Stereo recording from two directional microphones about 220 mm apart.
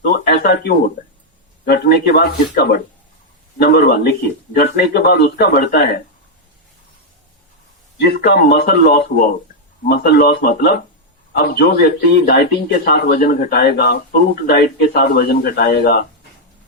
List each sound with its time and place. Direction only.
0.0 s speech: 45° left (ahead or behind)
8.0 s speech: 45° left (ahead or behind)